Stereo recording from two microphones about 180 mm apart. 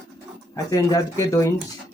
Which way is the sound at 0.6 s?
20° left (ahead or behind).